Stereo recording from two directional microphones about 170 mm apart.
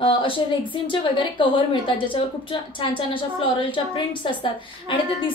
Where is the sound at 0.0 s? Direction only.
30° left (ahead or behind).